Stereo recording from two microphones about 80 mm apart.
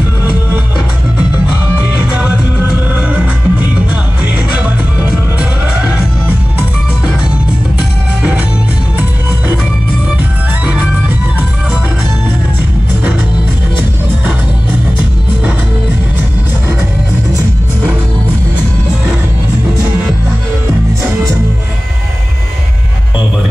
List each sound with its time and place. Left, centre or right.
1.8 s music: centre
8.2 s music: centre
10.6 s music: centre